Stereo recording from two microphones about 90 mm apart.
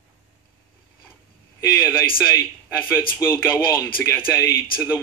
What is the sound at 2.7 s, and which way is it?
A man's voice, 25° left (ahead or behind).